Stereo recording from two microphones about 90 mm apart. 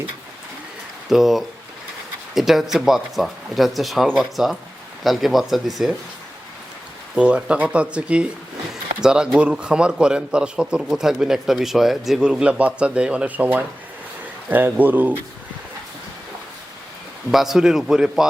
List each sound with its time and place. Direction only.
1.1 s speech: 5° right (ahead or behind)
7.2 s speech: 10° right (ahead or behind)
17.3 s speech: 5° right (ahead or behind)